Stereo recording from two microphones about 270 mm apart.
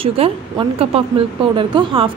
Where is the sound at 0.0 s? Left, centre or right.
Right.